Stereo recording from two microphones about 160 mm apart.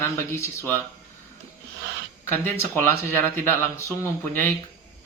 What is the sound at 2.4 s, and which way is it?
Speech, 15° left (ahead or behind).